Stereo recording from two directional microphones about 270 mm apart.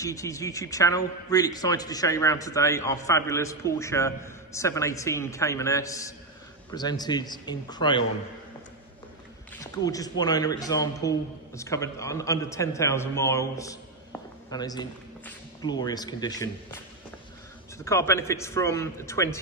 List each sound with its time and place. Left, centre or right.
0.0 s speech: centre
9.6 s a man's voice: centre
17.7 s speech: centre